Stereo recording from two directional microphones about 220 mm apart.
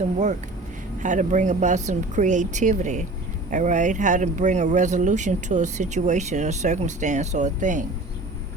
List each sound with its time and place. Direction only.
1.0 s speech: 35° right (ahead or behind)